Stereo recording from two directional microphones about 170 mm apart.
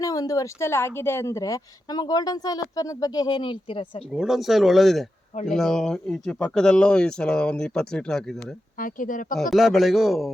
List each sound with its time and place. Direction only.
0.0 s a woman's voice: 20° left (ahead or behind)
4.1 s speech: centre (ahead or behind)
8.8 s speech: 50° left (ahead or behind)
9.3 s speech: centre (ahead or behind)